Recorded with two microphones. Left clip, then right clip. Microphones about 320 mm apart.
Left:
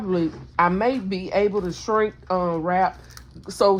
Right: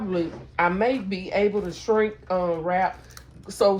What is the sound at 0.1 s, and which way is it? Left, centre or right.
Speech, left.